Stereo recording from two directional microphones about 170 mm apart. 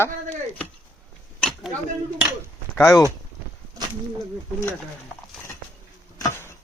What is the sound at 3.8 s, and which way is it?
Speech, 20° right (ahead or behind).